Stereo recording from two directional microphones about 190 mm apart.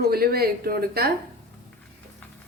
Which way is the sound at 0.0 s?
55° right (ahead or behind).